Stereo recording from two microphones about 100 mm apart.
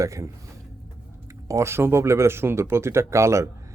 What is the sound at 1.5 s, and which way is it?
Speech, 25° right (ahead or behind).